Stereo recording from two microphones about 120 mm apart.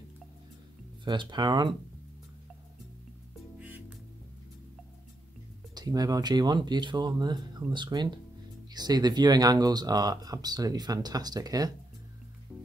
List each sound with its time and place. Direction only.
1.0 s speech: 40° right (ahead or behind)
3.5 s music: 10° right (ahead or behind)
5.8 s speech: 30° right (ahead or behind)